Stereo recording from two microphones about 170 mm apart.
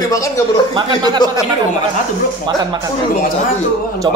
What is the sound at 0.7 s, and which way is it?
Speech, 25° right (ahead or behind).